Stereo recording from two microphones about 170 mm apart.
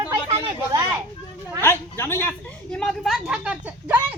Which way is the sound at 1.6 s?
15° left (ahead or behind).